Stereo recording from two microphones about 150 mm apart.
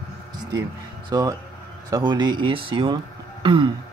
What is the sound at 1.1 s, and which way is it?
Speech, 25° right (ahead or behind).